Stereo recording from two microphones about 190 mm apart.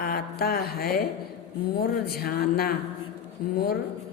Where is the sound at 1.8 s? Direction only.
55° left (ahead or behind).